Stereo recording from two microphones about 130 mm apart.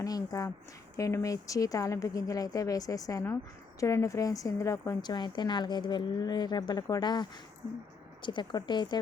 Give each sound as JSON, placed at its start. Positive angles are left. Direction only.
{"t": 0.0, "sound": "a woman's voice", "side_deg": 30}